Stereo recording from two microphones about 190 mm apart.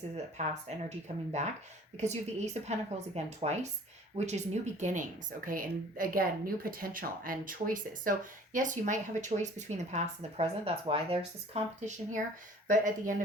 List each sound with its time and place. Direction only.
0.4 s a woman's voice: 35° right (ahead or behind)